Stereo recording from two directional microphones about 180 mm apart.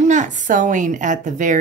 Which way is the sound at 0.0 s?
40° right (ahead or behind).